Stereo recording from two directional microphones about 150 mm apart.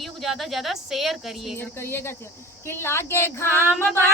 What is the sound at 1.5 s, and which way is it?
A woman's voice, 15° left (ahead or behind).